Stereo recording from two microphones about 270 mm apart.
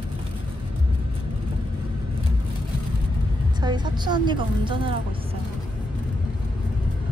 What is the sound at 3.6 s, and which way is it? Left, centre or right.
A woman's voice, centre.